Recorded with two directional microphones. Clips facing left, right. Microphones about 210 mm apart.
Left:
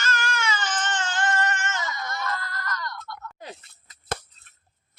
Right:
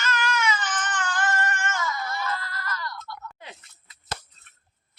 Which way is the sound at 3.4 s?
45° left (ahead or behind).